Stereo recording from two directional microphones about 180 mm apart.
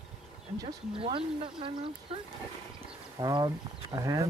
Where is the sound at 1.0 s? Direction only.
30° right (ahead or behind).